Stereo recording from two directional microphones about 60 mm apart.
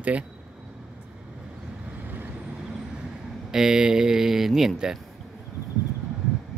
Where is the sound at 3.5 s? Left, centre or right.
Centre.